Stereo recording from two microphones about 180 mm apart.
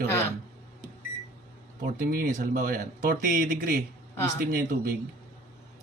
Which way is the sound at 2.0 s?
50° right (ahead or behind).